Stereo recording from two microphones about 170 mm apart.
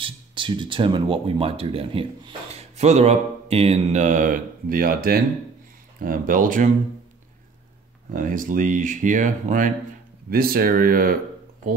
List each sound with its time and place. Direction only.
0.0 s speech: 30° right (ahead or behind); by 6.7 s 55° right (ahead or behind)
8.1 s speech: 55° right (ahead or behind)
10.3 s speech: 60° right (ahead or behind)